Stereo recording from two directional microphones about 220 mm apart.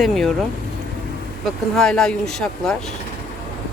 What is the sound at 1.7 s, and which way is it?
Speech, centre (ahead or behind).